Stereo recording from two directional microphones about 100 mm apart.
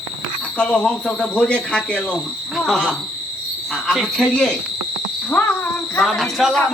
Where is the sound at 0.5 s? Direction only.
15° left (ahead or behind).